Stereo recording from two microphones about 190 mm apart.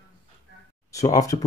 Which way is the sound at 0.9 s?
20° left (ahead or behind).